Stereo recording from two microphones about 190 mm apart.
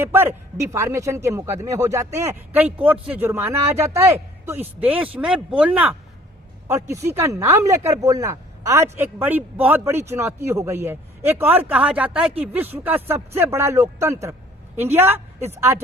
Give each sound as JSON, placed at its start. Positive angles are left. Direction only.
{"t": 0.0, "sound": "speech", "side_deg": -10}